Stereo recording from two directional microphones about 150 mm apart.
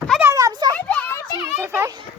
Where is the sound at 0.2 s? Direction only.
20° right (ahead or behind).